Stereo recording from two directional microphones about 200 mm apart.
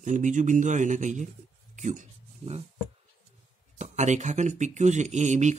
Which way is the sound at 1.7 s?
40° right (ahead or behind).